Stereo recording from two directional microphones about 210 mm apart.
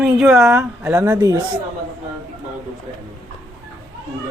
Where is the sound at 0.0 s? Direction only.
Centre (ahead or behind).